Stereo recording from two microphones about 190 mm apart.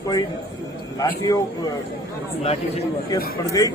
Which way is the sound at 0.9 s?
20° left (ahead or behind).